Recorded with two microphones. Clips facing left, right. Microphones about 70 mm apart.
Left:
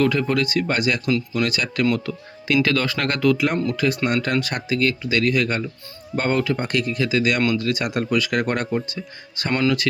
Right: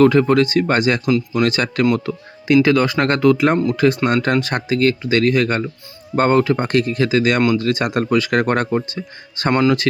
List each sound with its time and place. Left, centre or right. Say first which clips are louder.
0.0 s speech: right 7 dB; right
2.6 s speech: right 6 dB; right
9.5 s speech: right 5 dB; right